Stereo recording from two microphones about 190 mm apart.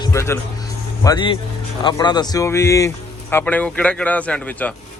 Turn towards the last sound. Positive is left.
turn(degrees=5)  # may be behind; listen again after turning